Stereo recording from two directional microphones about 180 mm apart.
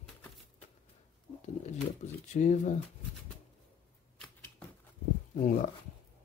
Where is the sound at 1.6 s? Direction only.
40° left (ahead or behind).